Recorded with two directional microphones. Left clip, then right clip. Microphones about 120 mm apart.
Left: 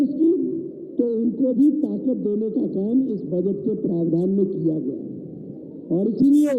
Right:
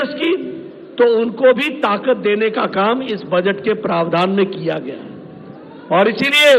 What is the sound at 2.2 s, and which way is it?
Speech, 40° right (ahead or behind).